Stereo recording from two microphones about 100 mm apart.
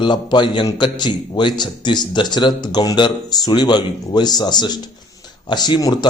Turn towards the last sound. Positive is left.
turn(degrees=45)  # may be behind; listen again after turning